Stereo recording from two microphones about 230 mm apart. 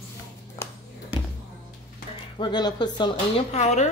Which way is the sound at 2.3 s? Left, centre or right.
Centre.